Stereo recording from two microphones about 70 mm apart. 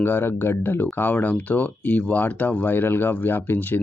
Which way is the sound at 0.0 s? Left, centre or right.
Left.